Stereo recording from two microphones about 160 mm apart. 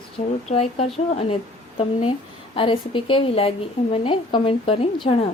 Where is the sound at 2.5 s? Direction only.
35° left (ahead or behind).